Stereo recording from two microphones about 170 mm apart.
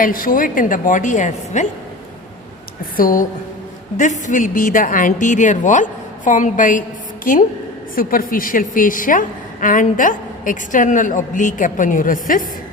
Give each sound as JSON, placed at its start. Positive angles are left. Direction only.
{"t": 0.0, "sound": "a woman's voice", "side_deg": 55}
{"t": 2.9, "sound": "a woman's voice", "side_deg": 55}